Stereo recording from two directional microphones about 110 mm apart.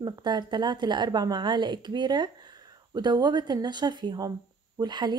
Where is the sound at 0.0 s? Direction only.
40° right (ahead or behind).